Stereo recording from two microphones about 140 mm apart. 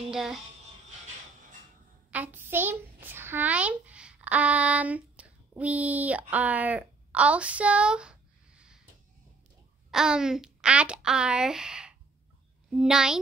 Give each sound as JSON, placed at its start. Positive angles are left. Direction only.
{"t": 0.1, "sound": "speech", "side_deg": 0}
{"t": 2.0, "sound": "a child's voice", "side_deg": -10}
{"t": 9.8, "sound": "a child's voice", "side_deg": -5}